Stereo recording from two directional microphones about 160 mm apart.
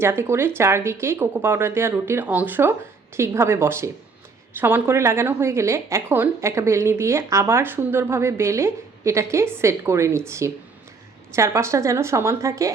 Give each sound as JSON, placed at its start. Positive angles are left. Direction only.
{"t": 0.0, "sound": "a woman's voice", "side_deg": -15}